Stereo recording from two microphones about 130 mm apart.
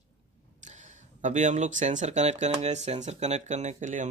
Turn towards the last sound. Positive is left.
turn(degrees=-70)  # may be behind; listen again after turning